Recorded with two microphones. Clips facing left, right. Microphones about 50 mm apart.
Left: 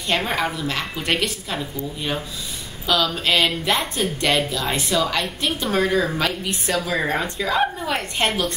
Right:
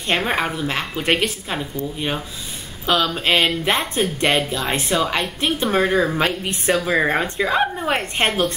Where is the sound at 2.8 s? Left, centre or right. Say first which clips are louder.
Right 2 dB; right.